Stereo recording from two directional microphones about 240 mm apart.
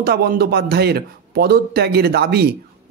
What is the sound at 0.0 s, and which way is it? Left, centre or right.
Speech, right.